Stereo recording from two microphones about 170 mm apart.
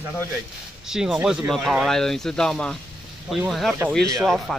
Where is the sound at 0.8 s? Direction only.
5° right (ahead or behind).